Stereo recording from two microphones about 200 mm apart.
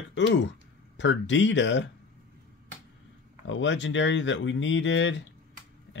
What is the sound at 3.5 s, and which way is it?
Speech, 65° left (ahead or behind).